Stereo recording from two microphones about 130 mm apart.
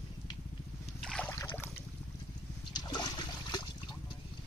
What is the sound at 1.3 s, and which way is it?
Boat, 20° left (ahead or behind).